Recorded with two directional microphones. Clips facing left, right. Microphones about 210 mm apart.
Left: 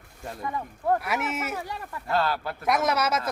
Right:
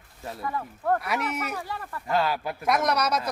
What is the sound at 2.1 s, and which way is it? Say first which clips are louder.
Speech: right 1 dB; 15° right (ahead or behind).